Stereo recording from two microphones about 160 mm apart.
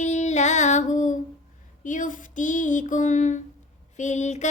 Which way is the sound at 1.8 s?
55° left (ahead or behind).